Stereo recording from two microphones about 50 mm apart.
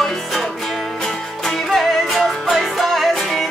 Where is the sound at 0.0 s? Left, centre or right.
Centre.